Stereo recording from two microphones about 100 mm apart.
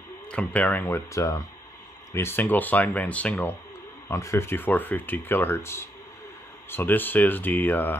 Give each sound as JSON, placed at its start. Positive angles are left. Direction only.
{"t": 0.3, "sound": "speech", "side_deg": 10}
{"t": 4.1, "sound": "speech", "side_deg": 30}